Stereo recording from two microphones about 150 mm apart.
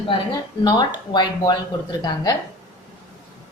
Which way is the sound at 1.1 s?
30° left (ahead or behind).